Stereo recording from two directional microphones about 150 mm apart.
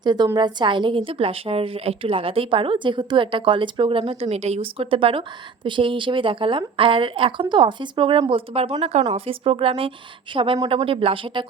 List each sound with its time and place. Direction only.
0.0 s a woman's voice: 30° right (ahead or behind)